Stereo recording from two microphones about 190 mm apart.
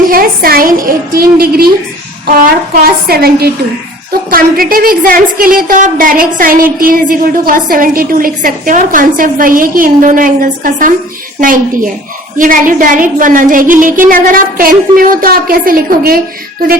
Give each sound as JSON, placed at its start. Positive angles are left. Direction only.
{"t": 0.1, "sound": "a woman's voice", "side_deg": -50}